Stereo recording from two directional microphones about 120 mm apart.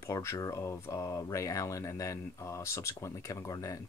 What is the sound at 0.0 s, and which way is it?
Speech, 25° left (ahead or behind).